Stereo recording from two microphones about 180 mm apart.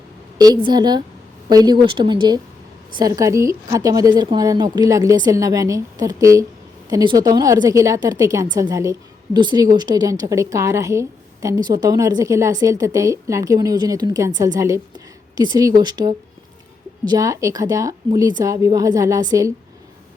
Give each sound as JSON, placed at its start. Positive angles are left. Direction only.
{"t": 0.3, "sound": "a woman's voice", "side_deg": -25}